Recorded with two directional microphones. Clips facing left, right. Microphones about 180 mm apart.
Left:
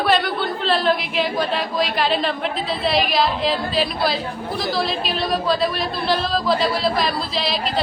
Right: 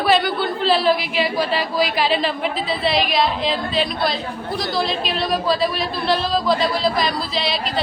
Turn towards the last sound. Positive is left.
turn(degrees=0)  # may be behind; listen again after turning